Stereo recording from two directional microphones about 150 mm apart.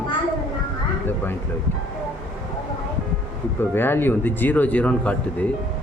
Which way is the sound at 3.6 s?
15° left (ahead or behind).